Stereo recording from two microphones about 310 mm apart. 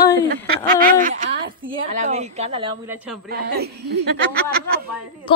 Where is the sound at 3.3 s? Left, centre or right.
Right.